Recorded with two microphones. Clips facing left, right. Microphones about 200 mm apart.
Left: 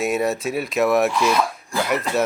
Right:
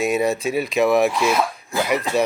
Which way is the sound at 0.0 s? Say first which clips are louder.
Right 2 dB; centre (ahead or behind).